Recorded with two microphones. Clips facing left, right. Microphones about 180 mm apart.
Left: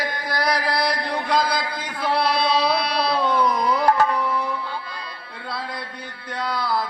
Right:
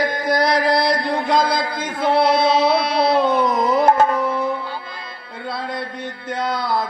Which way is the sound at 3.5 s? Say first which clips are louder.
Right 4 dB; 45° right (ahead or behind).